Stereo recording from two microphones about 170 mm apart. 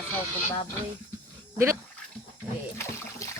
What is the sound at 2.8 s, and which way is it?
Splash, 15° left (ahead or behind).